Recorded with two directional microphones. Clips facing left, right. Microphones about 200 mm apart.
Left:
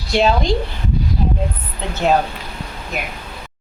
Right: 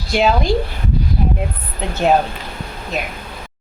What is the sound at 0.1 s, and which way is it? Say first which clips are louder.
Speech: even; 5° right (ahead or behind).